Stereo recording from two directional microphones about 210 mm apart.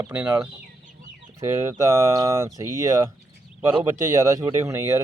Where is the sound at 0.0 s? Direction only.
5° right (ahead or behind).